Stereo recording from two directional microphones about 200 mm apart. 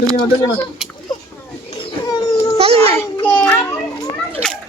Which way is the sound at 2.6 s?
30° right (ahead or behind).